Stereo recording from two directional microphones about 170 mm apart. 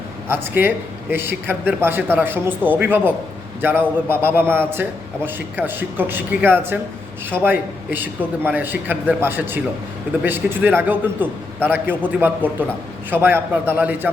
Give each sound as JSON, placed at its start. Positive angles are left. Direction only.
{"t": 0.3, "sound": "a man's voice", "side_deg": -10}